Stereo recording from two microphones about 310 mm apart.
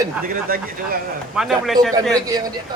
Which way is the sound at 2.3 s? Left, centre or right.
Centre.